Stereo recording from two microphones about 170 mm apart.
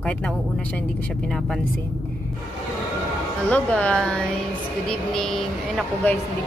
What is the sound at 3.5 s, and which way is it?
Speech, 10° left (ahead or behind).